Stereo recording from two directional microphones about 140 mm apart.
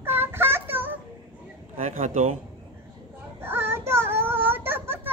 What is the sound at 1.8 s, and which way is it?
Speech, 55° right (ahead or behind).